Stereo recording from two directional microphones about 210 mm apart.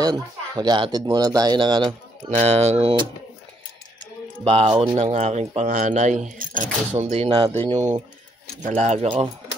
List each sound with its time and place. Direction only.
0.0 s speech: 20° right (ahead or behind)
4.5 s speech: 30° right (ahead or behind)